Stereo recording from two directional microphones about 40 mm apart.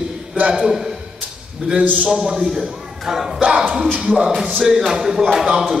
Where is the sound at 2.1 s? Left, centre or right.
Centre.